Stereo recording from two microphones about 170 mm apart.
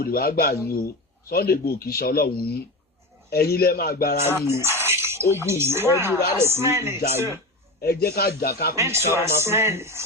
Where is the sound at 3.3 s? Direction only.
65° left (ahead or behind).